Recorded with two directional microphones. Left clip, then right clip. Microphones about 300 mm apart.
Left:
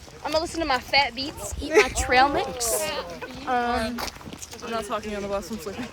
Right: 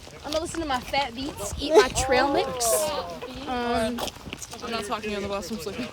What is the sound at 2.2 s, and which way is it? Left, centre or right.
Speech, centre.